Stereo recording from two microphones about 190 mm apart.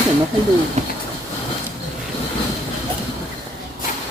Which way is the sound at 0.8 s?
35° right (ahead or behind).